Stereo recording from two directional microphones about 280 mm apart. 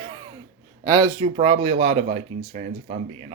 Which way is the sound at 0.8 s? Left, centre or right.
Centre.